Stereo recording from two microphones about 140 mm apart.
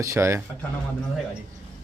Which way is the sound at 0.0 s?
20° right (ahead or behind).